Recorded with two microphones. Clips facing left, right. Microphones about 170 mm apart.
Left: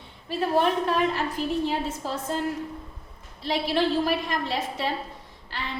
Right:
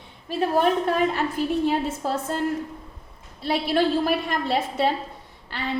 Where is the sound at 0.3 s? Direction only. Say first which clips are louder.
Right 2 dB; 45° right (ahead or behind).